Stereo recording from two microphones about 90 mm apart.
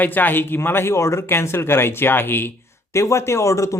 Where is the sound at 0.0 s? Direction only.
20° left (ahead or behind).